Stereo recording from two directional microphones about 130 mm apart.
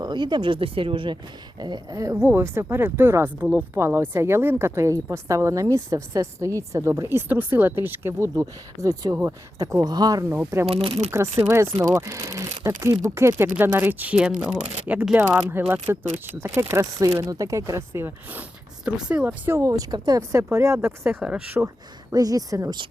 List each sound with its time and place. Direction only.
0.0 s speech: 35° right (ahead or behind)
10.7 s speech: 50° right (ahead or behind)
11.1 s speech: 20° right (ahead or behind)
19.5 s speech: 25° right (ahead or behind)
21.2 s speech: 5° right (ahead or behind)
22.1 s speech: 30° right (ahead or behind)